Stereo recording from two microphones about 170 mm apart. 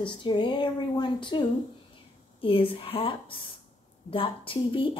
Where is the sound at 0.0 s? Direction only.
30° left (ahead or behind).